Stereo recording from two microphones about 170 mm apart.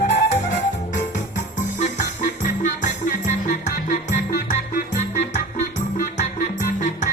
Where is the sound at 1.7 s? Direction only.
45° left (ahead or behind).